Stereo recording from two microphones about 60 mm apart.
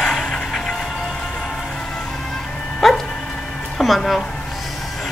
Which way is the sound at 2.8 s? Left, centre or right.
Centre.